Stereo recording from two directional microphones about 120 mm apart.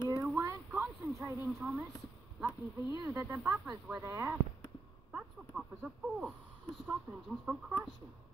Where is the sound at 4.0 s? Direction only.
25° right (ahead or behind).